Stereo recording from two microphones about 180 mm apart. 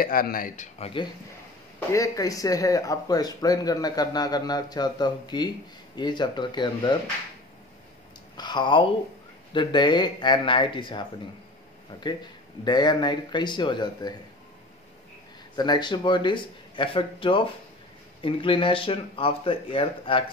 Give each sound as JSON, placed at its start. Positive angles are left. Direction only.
{"t": 0.0, "sound": "speech", "side_deg": 55}
{"t": 0.7, "sound": "speech", "side_deg": 35}
{"t": 1.9, "sound": "speech", "side_deg": 20}
{"t": 8.4, "sound": "speech", "side_deg": 25}
{"t": 12.6, "sound": "speech", "side_deg": 25}
{"t": 15.5, "sound": "speech", "side_deg": 25}